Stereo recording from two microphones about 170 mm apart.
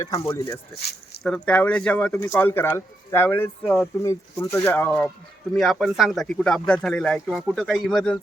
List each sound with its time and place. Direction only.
0.0 s speech: 15° left (ahead or behind)
0.8 s speech: 70° left (ahead or behind)
1.2 s speech: 5° left (ahead or behind)